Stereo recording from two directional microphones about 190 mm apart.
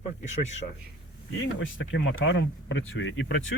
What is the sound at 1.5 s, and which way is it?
Speech, 85° left.